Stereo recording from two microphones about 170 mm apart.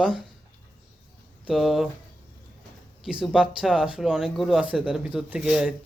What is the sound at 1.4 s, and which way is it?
Speech, centre (ahead or behind).